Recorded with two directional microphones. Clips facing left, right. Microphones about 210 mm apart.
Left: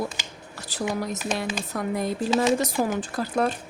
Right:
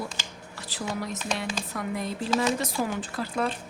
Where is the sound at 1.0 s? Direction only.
40° left (ahead or behind).